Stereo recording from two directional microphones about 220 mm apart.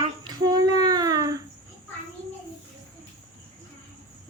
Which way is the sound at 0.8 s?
15° right (ahead or behind).